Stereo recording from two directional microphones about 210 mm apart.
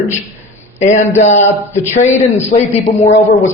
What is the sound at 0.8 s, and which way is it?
Speech, 35° left (ahead or behind).